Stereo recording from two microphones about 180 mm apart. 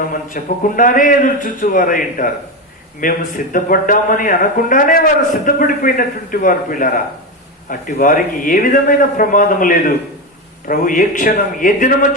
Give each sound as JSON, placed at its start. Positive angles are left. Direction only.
{"t": 0.1, "sound": "a man's voice", "side_deg": 50}